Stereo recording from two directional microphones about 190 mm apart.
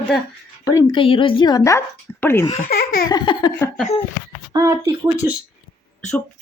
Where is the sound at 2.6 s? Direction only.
50° left (ahead or behind).